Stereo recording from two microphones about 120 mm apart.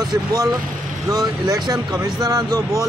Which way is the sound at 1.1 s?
30° right (ahead or behind).